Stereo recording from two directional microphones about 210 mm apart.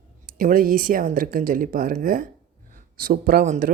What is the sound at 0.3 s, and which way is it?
Speech, 40° right (ahead or behind).